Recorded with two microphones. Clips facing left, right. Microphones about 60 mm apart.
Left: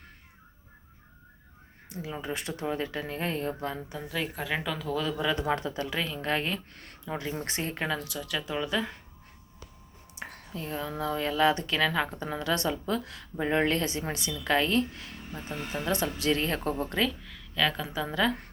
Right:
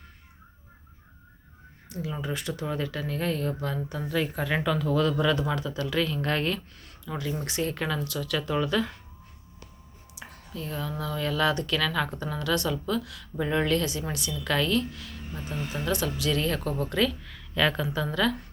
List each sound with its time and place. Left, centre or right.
1.9 s a woman's voice: left
3.9 s speech: centre
5.3 s a woman's voice: left
6.0 s speech: centre
7.0 s a woman's voice: left
7.9 s speech: centre
8.3 s speech: centre
10.2 s a sound: left
10.5 s a woman's voice: left
17.2 s speech: centre
17.9 s speech: centre